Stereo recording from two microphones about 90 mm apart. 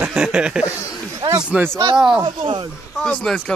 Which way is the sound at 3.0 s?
10° left (ahead or behind).